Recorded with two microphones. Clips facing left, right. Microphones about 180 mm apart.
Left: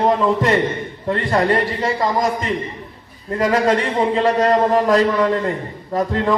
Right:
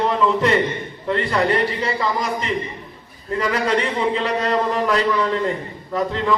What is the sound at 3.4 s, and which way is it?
A man's voice, 45° left (ahead or behind).